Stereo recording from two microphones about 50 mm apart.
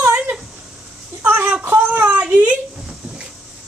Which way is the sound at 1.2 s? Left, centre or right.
Right.